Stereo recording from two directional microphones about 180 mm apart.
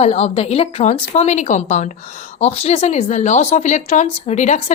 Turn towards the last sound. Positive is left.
turn(degrees=40)  # may be behind; listen again after turning